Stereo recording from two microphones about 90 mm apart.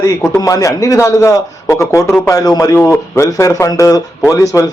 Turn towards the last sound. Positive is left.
turn(degrees=35)  # may be behind; listen again after turning